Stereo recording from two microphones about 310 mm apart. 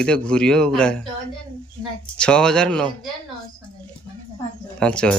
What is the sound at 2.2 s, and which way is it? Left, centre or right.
Speech, centre.